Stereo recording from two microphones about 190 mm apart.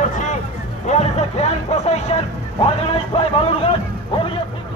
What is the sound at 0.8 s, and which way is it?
Music, 35° left (ahead or behind).